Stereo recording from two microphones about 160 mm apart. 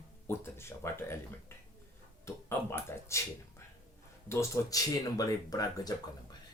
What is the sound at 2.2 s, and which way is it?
Speech, 15° left (ahead or behind).